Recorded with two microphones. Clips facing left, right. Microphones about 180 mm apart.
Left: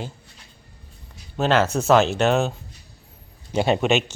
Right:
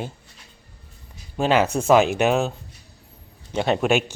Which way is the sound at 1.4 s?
10° right (ahead or behind).